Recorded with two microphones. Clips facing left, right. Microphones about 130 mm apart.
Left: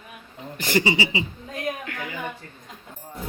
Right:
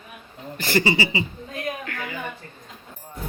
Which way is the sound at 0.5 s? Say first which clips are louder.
Right 1 dB; 20° left (ahead or behind).